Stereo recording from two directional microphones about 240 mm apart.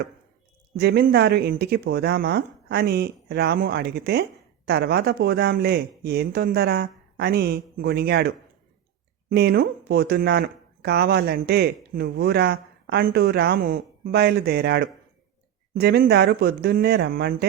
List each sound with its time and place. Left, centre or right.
0.8 s speech: right
9.3 s speech: right